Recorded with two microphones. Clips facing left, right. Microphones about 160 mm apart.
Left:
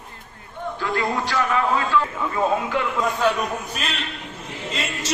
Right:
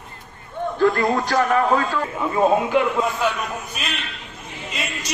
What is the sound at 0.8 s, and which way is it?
A man's voice, 50° right (ahead or behind).